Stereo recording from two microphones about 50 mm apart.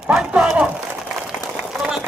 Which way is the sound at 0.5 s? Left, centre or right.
Right.